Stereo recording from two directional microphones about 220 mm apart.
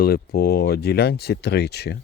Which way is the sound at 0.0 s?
45° left (ahead or behind).